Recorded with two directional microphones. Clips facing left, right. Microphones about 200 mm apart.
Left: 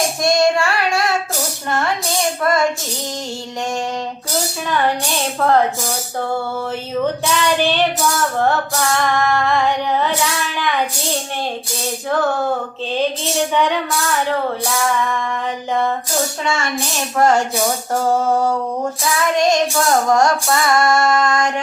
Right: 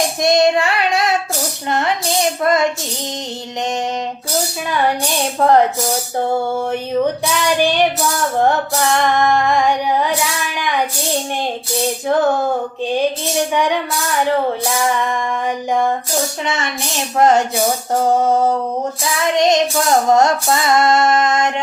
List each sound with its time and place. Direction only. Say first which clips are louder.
0.2 s child singing: right 2 dB; 20° right (ahead or behind)
2.4 s female singing: right 1 dB; 20° right (ahead or behind)
5.4 s music: right 3 dB; 15° right (ahead or behind)
6.1 s female singing: right 4 dB; 20° right (ahead or behind)
7.3 s music: right 1 dB; 10° right (ahead or behind)
12.0 s female singing: right 2 dB; 20° right (ahead or behind)
13.5 s music: even; 10° right (ahead or behind)
17.2 s female singing: right 2 dB; 20° right (ahead or behind)